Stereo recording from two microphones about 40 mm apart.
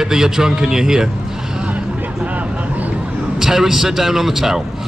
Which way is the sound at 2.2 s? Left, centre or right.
Right.